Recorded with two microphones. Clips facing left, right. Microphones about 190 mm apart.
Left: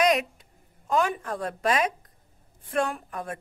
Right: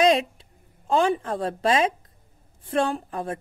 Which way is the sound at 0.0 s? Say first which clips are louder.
Right 3 dB; 25° right (ahead or behind).